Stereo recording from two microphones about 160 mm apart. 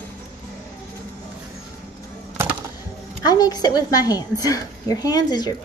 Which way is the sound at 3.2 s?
25° left (ahead or behind).